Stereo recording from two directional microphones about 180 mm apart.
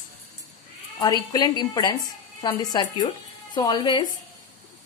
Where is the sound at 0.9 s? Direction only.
20° left (ahead or behind).